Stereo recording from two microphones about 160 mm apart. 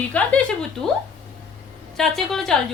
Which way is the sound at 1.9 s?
Centre (ahead or behind).